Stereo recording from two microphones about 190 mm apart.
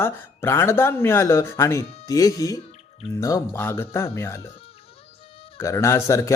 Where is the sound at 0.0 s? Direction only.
15° left (ahead or behind).